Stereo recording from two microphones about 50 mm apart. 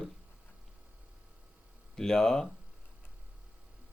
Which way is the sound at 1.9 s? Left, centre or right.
Centre.